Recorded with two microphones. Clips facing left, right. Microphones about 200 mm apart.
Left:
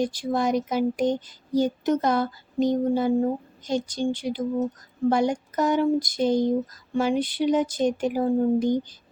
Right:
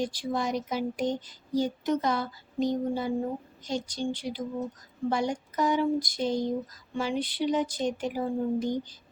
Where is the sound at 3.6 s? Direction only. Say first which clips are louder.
Left 6 dB; 50° left (ahead or behind).